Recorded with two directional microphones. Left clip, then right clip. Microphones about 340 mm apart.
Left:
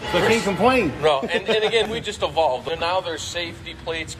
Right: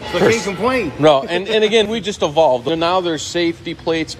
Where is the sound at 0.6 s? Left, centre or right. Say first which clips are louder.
Even; centre.